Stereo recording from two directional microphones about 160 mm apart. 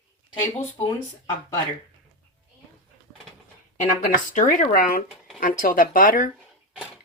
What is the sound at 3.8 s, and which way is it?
Speech, 55° left (ahead or behind).